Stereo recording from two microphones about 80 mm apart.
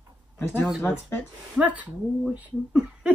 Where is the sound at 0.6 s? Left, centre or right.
Centre.